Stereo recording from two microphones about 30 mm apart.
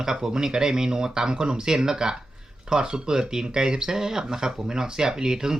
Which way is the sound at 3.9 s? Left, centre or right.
Centre.